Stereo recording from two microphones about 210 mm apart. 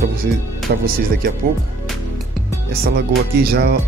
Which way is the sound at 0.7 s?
45° right (ahead or behind).